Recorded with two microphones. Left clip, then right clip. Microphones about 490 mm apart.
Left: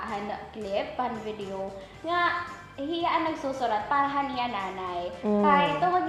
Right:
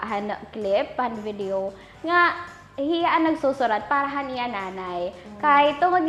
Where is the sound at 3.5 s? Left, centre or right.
Right.